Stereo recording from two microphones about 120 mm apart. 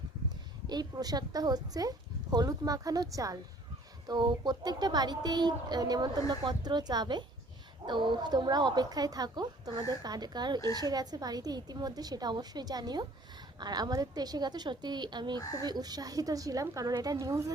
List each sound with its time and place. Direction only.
0.7 s speech: 35° right (ahead or behind)
15.4 s speech: 30° left (ahead or behind)
15.6 s speech: 35° right (ahead or behind)